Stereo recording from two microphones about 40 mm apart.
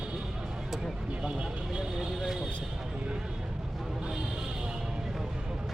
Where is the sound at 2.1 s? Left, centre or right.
Centre.